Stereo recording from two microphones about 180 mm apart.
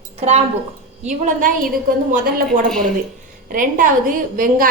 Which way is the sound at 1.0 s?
40° right (ahead or behind).